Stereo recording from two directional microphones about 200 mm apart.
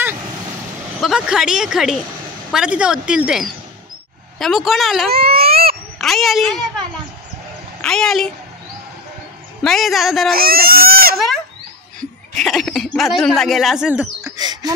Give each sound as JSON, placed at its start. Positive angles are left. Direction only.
{"t": 1.0, "sound": "speech", "side_deg": -5}
{"t": 5.1, "sound": "baby cry", "side_deg": -50}
{"t": 5.5, "sound": "a sound", "side_deg": -50}
{"t": 5.9, "sound": "speech", "side_deg": 0}
{"t": 7.8, "sound": "speech", "side_deg": 5}
{"t": 9.6, "sound": "speech", "side_deg": 0}
{"t": 10.3, "sound": "goat", "side_deg": -50}
{"t": 12.0, "sound": "speech", "side_deg": 0}
{"t": 14.2, "sound": "a sound", "side_deg": -20}